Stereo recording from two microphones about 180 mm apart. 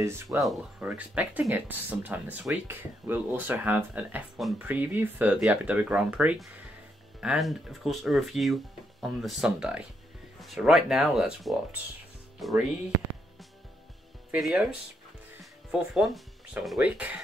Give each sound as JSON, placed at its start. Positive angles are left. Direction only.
{"t": 0.0, "sound": "speech", "side_deg": -15}
{"t": 0.4, "sound": "speech", "side_deg": -5}
{"t": 14.3, "sound": "speech", "side_deg": -5}
{"t": 15.7, "sound": "speech", "side_deg": 0}